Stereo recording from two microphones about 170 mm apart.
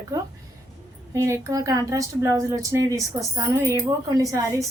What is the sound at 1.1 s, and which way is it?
A woman's voice, 20° right (ahead or behind).